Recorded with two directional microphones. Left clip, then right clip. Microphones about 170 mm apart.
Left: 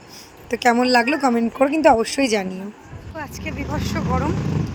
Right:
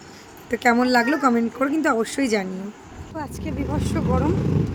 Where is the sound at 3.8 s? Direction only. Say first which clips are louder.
Even; centre (ahead or behind).